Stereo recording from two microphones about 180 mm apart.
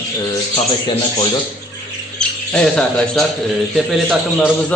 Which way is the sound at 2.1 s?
5° left (ahead or behind).